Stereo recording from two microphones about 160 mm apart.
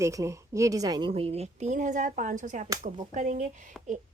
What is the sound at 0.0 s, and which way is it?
Speech, 20° right (ahead or behind).